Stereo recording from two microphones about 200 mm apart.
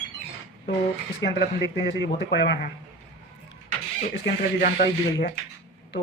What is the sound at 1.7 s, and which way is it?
Speech, 55° left (ahead or behind).